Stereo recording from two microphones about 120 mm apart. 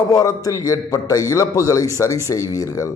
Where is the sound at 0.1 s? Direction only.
30° left (ahead or behind).